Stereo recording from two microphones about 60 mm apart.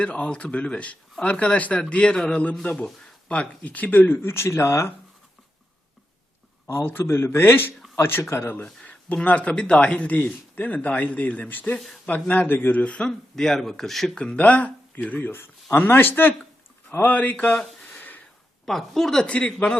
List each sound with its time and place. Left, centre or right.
0.0 s speech: centre
3.6 s speech: left
6.7 s speech: left
8.6 s a sound: centre
9.1 s speech: left
12.8 s speech: centre
13.1 s speech: centre
14.2 s speech: left
18.6 s a woman's voice: centre
19.3 s speech: centre